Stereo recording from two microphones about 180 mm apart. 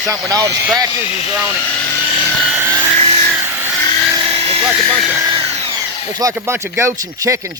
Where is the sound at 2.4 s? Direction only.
10° right (ahead or behind).